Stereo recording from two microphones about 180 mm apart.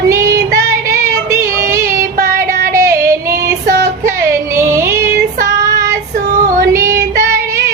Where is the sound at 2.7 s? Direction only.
15° right (ahead or behind).